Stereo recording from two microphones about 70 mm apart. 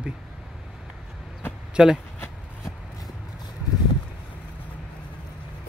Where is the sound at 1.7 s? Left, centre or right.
Centre.